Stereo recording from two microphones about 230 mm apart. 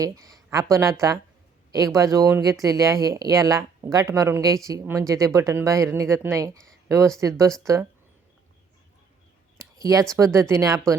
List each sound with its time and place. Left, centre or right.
0.0 s speech: centre
2.0 s speech: centre
9.6 s a sound: centre
10.1 s speech: centre